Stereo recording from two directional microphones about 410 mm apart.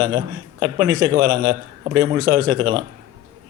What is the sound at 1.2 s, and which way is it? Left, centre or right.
A man's voice, centre.